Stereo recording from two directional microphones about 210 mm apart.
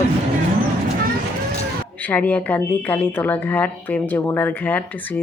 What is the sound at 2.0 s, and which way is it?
A woman's voice, 10° left (ahead or behind).